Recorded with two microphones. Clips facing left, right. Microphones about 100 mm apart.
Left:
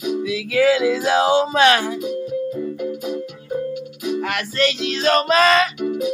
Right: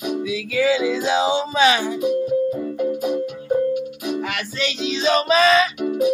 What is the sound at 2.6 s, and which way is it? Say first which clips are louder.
Music: right 3 dB; 45° right (ahead or behind).